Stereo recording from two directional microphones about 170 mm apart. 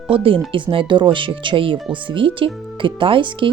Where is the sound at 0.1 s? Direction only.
30° right (ahead or behind).